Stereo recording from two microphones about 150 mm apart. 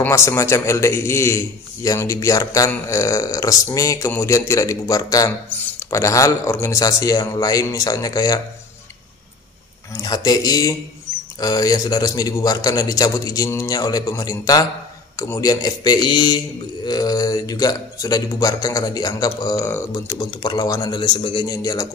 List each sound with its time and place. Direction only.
0.0 s a man's voice: 15° left (ahead or behind)
9.9 s a man's voice: 25° left (ahead or behind)